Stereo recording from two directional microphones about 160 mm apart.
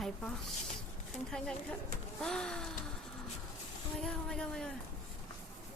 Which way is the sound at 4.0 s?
5° left (ahead or behind).